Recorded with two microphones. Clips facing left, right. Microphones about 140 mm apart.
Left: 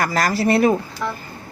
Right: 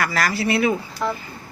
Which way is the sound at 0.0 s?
40° left (ahead or behind).